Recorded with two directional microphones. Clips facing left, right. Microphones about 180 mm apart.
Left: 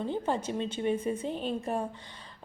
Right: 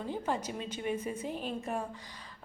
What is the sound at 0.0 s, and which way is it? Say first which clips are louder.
A woman's voice: left 4 dB; 30° left (ahead or behind).